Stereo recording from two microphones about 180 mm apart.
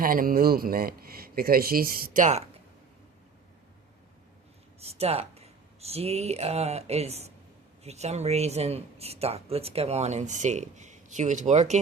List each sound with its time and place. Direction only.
0.0 s speech: 50° right (ahead or behind)
4.8 s speech: 35° right (ahead or behind)